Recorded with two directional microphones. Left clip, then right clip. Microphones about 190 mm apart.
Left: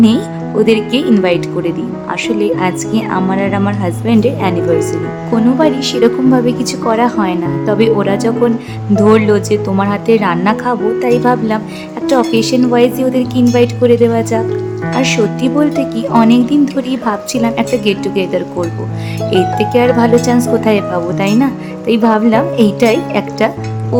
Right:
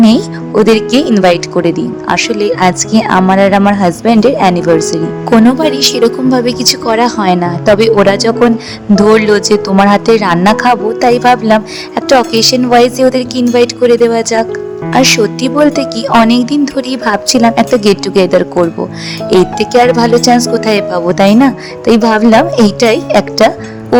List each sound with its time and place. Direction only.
0.6 s speech: 30° right (ahead or behind)